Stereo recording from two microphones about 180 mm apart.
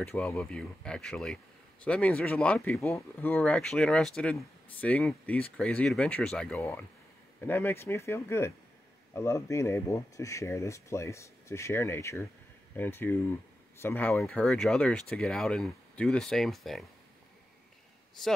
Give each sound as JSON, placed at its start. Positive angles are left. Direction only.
{"t": 0.1, "sound": "speech", "side_deg": 15}